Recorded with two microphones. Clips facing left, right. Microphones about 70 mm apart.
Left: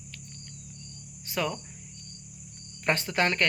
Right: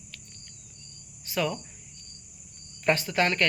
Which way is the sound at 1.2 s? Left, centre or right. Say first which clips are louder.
Right 2 dB; left.